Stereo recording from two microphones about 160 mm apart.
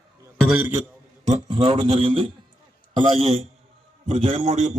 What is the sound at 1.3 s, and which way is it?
A man's voice, 35° right (ahead or behind).